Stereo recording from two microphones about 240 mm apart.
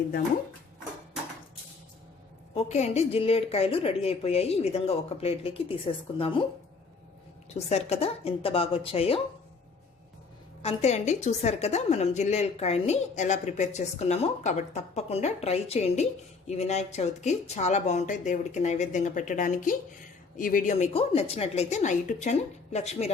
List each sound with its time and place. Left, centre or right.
2.6 s a woman's voice: left
7.5 s a woman's voice: left
10.6 s a woman's voice: left